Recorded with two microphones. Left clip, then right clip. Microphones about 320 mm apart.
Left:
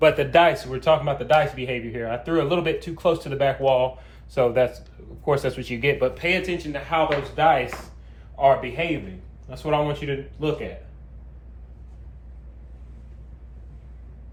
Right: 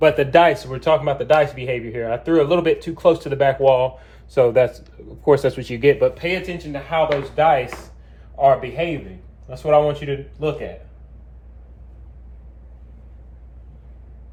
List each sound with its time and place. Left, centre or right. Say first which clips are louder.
0.0 s speech: right 3 dB; right
8.4 s speech: right 3 dB; right